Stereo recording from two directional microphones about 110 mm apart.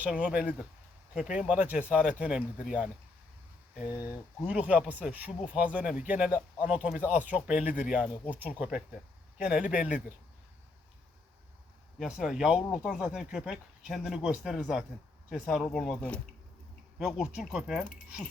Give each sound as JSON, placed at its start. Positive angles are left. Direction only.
{"t": 0.0, "sound": "speech", "side_deg": -10}
{"t": 11.9, "sound": "speech", "side_deg": -5}
{"t": 17.0, "sound": "speech", "side_deg": 0}